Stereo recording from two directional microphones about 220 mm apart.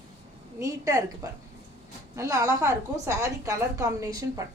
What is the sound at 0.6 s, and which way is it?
Speech, 15° right (ahead or behind).